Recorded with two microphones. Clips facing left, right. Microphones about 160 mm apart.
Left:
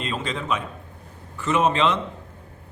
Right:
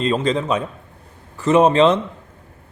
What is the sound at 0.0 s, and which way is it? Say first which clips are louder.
A man's voice: right 10 dB; 40° right (ahead or behind).